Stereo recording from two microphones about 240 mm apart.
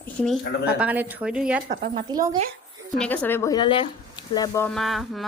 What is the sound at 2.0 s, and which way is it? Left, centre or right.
Speech, centre.